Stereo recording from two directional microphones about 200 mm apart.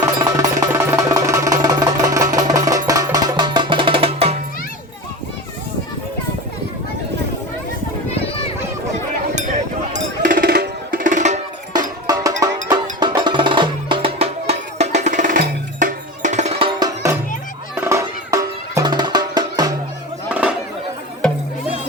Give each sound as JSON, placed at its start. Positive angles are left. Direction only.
{"t": 0.0, "sound": "music", "side_deg": -15}
{"t": 8.1, "sound": "a sound", "side_deg": 30}
{"t": 9.9, "sound": "music", "side_deg": -40}
{"t": 11.7, "sound": "music", "side_deg": -20}